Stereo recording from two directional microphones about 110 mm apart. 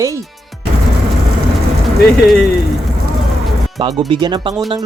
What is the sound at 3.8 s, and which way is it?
Speech, 45° right (ahead or behind).